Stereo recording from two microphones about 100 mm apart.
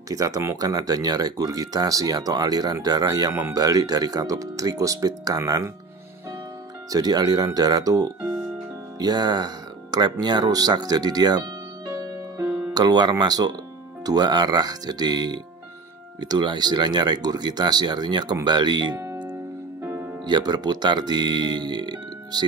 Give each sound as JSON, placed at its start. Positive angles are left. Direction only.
{"t": 0.1, "sound": "speech", "side_deg": -35}
{"t": 6.9, "sound": "speech", "side_deg": -40}
{"t": 12.7, "sound": "speech", "side_deg": -45}
{"t": 19.8, "sound": "music", "side_deg": -25}
{"t": 20.2, "sound": "speech", "side_deg": -45}